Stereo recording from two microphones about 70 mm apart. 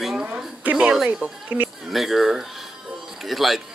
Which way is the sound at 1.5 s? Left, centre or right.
Right.